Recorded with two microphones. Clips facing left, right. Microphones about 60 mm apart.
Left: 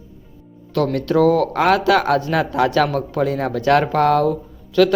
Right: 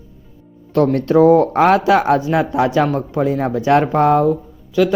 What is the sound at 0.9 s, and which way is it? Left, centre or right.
Speech, right.